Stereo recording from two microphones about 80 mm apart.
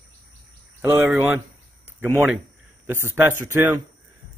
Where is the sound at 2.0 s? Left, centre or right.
Right.